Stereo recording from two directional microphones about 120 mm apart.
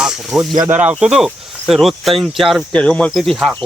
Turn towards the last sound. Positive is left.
turn(degrees=0)  # may be behind; listen again after turning